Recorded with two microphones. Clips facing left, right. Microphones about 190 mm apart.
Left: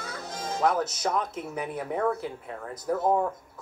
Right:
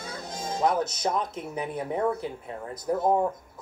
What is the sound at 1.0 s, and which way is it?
Speech, 20° right (ahead or behind).